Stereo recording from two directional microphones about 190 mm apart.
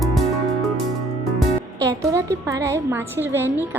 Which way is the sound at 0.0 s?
Centre (ahead or behind).